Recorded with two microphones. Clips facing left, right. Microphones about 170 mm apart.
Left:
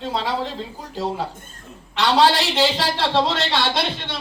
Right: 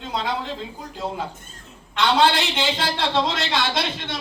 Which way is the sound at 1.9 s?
35° left (ahead or behind).